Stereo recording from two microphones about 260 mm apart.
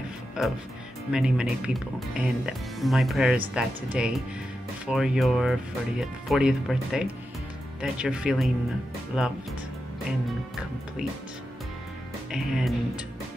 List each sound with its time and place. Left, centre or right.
0.4 s speech: centre
12.3 s speech: centre